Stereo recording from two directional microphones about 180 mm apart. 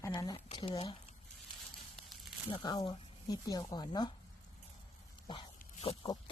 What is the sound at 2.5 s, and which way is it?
Speech, 25° left (ahead or behind).